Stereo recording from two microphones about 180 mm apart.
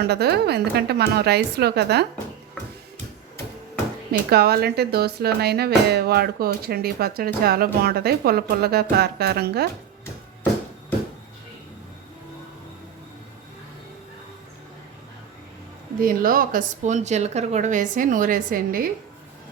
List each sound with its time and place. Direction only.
0.1 s speech: 65° right (ahead or behind)
4.3 s speech: 60° right (ahead or behind)
16.0 s speech: 50° right (ahead or behind)